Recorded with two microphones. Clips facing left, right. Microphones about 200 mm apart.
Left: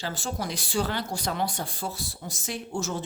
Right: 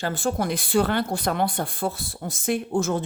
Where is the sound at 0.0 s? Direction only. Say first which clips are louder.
Right 7 dB; 55° right (ahead or behind).